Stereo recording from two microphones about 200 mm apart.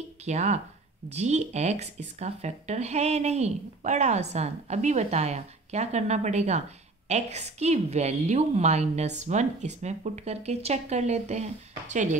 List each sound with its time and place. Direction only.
0.2 s speech: 35° right (ahead or behind)